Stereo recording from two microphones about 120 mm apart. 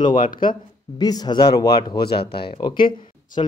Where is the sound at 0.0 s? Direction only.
40° left (ahead or behind).